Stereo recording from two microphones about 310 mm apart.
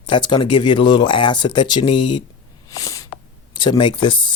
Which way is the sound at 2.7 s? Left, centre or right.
Centre.